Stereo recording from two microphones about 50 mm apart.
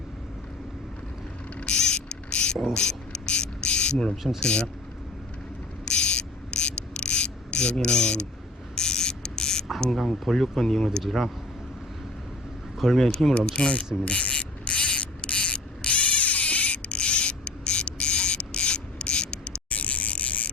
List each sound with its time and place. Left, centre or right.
1.6 s insect: centre
2.7 s mechanisms: centre
3.9 s speech: centre
4.4 s speech: left
5.8 s a sound: left
8.7 s mechanisms: centre
9.9 s speech: centre
12.8 s speech: centre
13.3 s insect: left